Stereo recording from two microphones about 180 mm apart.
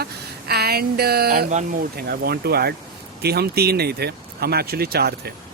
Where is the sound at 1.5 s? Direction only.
45° right (ahead or behind).